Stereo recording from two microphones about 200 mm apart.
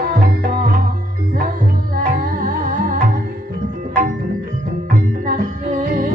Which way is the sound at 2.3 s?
45° right (ahead or behind).